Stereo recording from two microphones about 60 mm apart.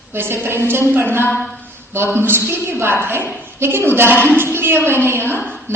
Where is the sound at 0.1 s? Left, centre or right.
Right.